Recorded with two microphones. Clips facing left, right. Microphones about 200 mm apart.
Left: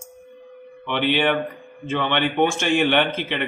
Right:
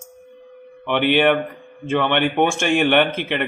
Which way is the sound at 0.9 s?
55° right (ahead or behind).